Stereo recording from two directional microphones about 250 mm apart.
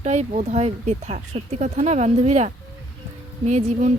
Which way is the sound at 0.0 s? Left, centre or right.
Right.